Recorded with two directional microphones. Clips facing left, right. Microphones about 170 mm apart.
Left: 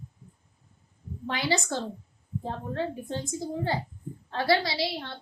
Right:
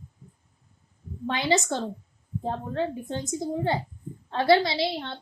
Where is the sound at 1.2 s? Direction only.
20° right (ahead or behind).